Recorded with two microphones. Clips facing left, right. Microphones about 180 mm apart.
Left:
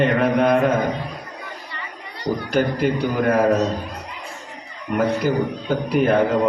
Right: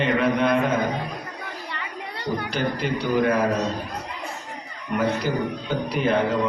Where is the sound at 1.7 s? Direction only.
65° right (ahead or behind).